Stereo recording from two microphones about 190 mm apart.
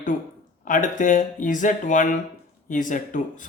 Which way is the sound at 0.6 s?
45° left (ahead or behind).